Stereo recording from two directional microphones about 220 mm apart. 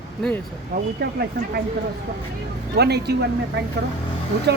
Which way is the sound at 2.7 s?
50° right (ahead or behind).